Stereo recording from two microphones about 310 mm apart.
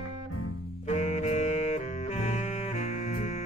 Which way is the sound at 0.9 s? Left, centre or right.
Left.